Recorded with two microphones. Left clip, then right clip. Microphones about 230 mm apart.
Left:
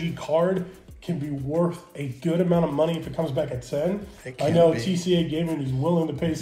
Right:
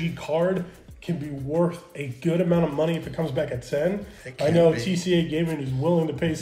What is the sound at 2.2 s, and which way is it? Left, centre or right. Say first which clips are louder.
A man's voice: even; right.